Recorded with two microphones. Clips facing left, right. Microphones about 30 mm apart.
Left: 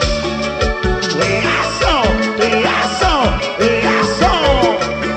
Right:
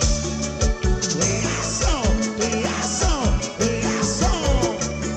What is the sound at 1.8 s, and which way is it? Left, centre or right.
Music, left.